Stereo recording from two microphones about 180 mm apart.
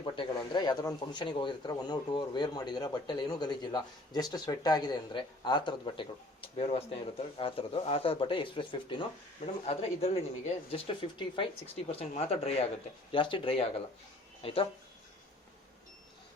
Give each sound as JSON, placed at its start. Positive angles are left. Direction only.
{"t": 0.0, "sound": "speech", "side_deg": 25}